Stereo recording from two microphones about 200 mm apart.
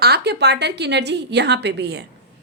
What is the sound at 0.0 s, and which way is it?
A woman's voice, 55° right (ahead or behind).